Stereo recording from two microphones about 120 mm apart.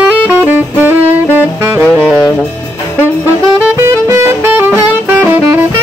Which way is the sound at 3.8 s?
25° right (ahead or behind).